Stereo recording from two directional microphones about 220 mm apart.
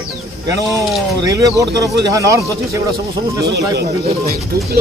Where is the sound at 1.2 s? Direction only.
15° right (ahead or behind).